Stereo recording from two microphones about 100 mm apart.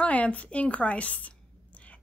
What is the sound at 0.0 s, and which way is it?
A woman's voice, 15° left (ahead or behind).